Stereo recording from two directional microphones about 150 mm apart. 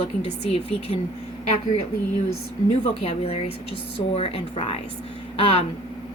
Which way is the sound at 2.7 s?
40° left (ahead or behind).